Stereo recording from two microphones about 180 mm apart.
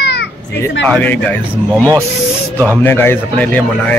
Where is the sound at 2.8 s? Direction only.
10° left (ahead or behind).